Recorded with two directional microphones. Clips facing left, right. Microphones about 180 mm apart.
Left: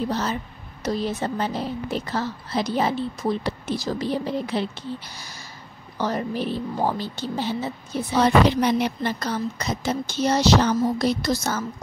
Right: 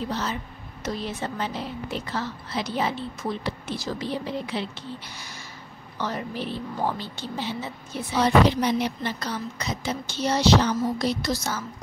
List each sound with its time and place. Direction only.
0.1 s a woman's voice: 40° left (ahead or behind)
8.5 s a woman's voice: 60° left (ahead or behind)